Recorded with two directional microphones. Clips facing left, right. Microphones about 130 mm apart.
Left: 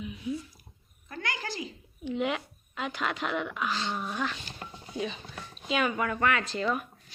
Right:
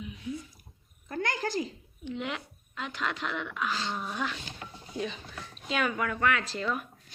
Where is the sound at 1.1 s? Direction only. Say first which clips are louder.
Right 5 dB; 45° right (ahead or behind).